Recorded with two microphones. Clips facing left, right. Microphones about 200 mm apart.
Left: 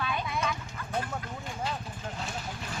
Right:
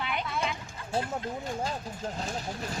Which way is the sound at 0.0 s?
20° right (ahead or behind).